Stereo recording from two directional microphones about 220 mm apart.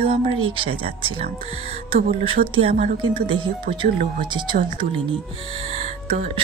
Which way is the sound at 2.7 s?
40° right (ahead or behind).